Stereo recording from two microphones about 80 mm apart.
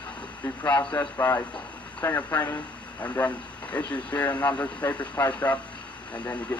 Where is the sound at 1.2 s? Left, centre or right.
Left.